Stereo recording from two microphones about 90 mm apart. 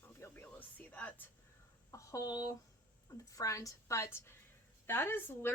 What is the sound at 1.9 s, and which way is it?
A woman's voice, 40° left (ahead or behind).